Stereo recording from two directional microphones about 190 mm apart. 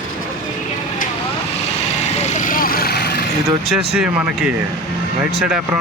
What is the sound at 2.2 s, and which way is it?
Vehicle, 40° left (ahead or behind).